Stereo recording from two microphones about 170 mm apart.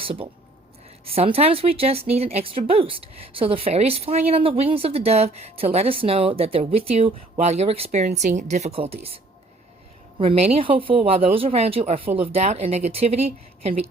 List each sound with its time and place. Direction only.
0.0 s speech: 35° right (ahead or behind)
10.2 s speech: 35° right (ahead or behind)